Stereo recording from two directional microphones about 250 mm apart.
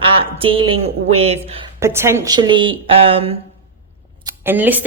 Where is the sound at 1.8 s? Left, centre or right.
Centre.